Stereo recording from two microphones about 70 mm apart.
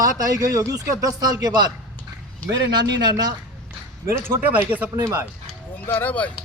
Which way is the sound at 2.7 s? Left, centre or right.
Right.